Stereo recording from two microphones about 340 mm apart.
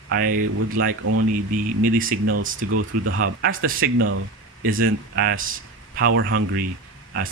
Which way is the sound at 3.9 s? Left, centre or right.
Right.